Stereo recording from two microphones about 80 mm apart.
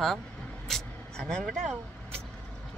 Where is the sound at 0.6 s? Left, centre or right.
Centre.